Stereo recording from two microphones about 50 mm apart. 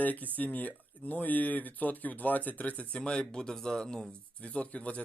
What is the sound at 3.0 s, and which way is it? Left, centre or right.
Speech, centre.